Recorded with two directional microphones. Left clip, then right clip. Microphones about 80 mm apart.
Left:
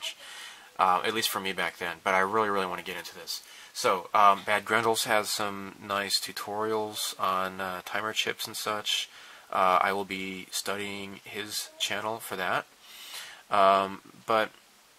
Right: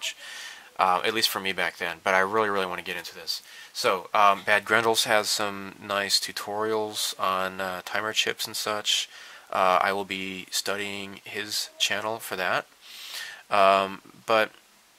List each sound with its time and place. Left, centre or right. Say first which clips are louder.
0.0 s speech: right 4 dB; right